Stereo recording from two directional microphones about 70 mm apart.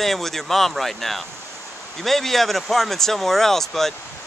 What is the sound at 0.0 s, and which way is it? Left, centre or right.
Speech, centre.